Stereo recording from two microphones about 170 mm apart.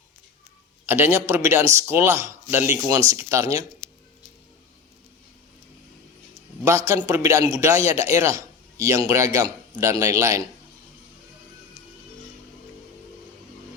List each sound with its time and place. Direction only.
0.9 s a man's voice: 10° right (ahead or behind)
6.7 s a man's voice: 15° right (ahead or behind)